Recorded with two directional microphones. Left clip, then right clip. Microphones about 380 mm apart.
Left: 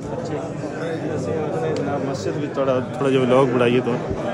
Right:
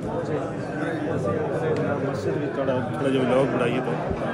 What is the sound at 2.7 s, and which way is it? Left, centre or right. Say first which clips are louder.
A man's voice: left 5 dB; centre.